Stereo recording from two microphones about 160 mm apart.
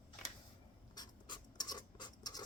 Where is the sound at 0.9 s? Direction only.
25° left (ahead or behind).